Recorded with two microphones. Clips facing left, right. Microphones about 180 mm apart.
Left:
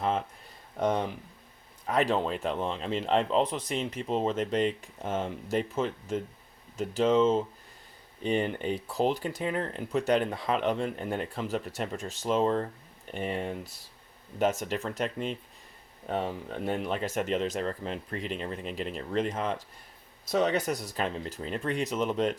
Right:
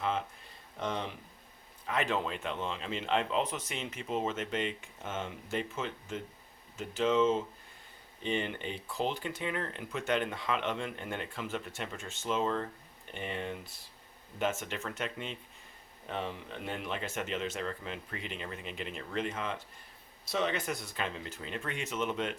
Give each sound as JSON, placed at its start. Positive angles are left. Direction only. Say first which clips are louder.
{"t": 0.0, "sound": "speech", "louder": "left 4 dB", "side_deg": 40}
{"t": 1.9, "sound": "speech", "louder": "left 6 dB", "side_deg": 35}